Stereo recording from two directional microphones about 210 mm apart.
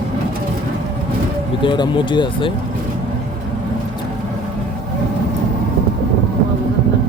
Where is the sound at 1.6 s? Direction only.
20° left (ahead or behind).